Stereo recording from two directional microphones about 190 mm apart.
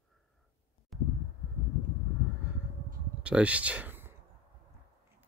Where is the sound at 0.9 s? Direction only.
Centre (ahead or behind).